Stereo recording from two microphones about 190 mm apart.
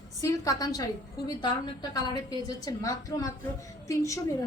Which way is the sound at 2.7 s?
20° left (ahead or behind).